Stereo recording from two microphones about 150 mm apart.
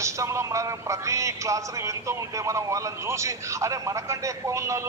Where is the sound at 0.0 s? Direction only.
20° right (ahead or behind).